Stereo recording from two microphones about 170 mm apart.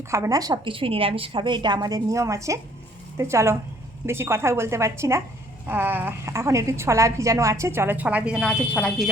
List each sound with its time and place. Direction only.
0.1 s a woman's voice: 20° right (ahead or behind); by 9.0 s 5° left (ahead or behind)